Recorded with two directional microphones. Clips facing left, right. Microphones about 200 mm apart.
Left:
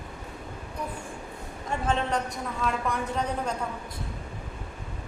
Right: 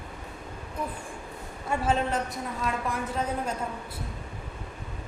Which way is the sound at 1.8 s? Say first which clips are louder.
Even; centre (ahead or behind).